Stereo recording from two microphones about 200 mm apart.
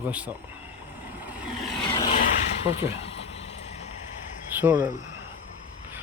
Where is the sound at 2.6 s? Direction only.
30° left (ahead or behind).